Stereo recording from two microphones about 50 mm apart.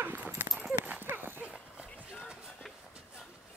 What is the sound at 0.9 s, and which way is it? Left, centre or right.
Horse, right.